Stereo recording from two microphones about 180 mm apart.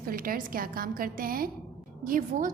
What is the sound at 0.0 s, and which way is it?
A woman's voice, 55° right (ahead or behind).